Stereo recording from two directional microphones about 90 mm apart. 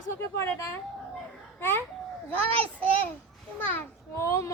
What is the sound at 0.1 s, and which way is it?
Speech, 30° left (ahead or behind).